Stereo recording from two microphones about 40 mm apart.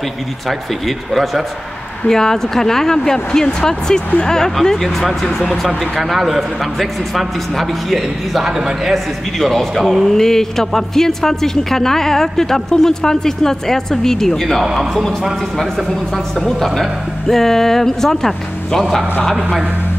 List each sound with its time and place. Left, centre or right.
0.5 s a man's voice: centre
2.0 s speech: centre
5.9 s a man's voice: centre
8.5 s a man's voice: centre
8.9 s a man's voice: centre
14.6 s a man's voice: centre
16.3 s speech: centre